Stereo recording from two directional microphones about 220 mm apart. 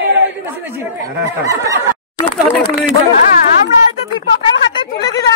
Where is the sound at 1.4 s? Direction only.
15° right (ahead or behind).